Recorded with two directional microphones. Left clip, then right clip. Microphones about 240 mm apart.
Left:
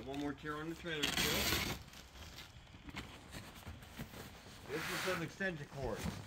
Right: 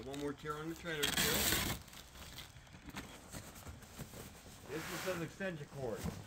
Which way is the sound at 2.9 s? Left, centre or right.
Right.